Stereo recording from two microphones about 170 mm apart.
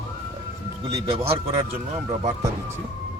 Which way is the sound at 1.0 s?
35° right (ahead or behind).